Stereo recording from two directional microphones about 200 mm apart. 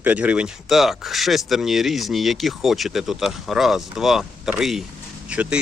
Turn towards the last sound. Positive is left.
turn(degrees=-5)  # may be behind; listen again after turning